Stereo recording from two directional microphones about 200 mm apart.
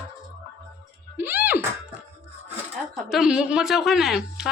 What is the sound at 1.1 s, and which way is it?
Music, 10° right (ahead or behind).